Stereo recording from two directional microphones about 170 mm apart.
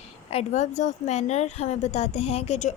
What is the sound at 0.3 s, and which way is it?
A woman's voice, 40° left (ahead or behind).